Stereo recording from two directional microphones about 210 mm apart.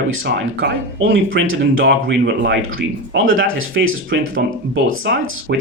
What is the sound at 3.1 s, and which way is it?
Speech, 70° right (ahead or behind).